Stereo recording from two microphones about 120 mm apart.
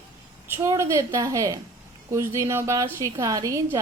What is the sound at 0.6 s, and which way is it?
A woman's voice, 25° right (ahead or behind).